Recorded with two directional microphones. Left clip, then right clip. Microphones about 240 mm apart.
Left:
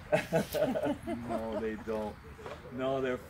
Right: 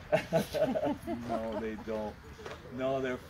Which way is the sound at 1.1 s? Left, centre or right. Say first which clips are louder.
Even; centre.